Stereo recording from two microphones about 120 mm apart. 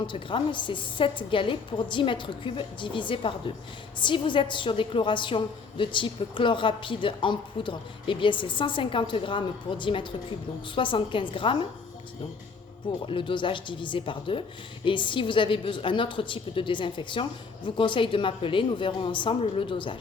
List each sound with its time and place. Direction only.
0.1 s a woman's voice: 45° left (ahead or behind)
13.1 s a woman's voice: 45° left (ahead or behind)